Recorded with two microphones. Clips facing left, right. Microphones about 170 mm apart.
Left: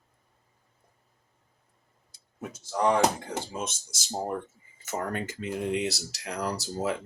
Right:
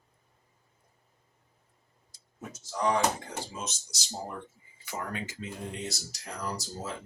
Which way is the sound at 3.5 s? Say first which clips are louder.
Left 5 dB; 55° left (ahead or behind).